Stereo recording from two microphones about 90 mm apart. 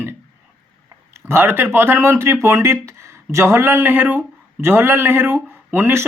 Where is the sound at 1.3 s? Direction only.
25° right (ahead or behind).